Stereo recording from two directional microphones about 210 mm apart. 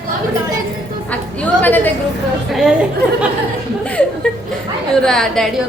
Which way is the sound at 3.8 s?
5° left (ahead or behind).